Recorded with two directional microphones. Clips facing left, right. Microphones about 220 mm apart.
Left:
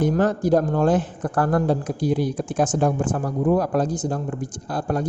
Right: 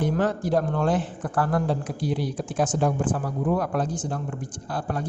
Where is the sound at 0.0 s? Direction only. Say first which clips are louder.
Left 4 dB; 40° left (ahead or behind).